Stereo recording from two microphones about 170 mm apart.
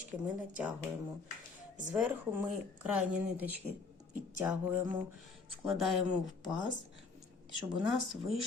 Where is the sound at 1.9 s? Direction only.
10° right (ahead or behind).